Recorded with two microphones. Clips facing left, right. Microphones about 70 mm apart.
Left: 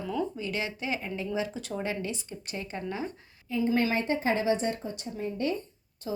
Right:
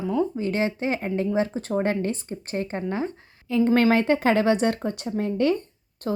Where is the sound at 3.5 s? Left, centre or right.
Right.